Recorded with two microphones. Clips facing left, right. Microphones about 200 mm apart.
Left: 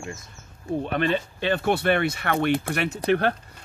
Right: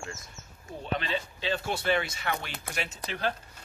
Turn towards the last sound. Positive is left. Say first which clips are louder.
# left 11 dB
turn(degrees=60)  # may be behind; listen again after turning